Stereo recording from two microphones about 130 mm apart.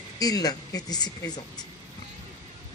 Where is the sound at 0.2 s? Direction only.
30° left (ahead or behind).